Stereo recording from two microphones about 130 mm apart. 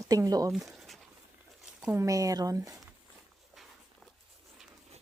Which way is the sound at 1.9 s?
25° right (ahead or behind).